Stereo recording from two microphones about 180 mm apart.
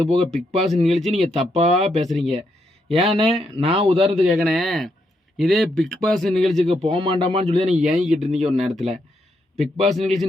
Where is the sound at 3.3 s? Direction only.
35° right (ahead or behind).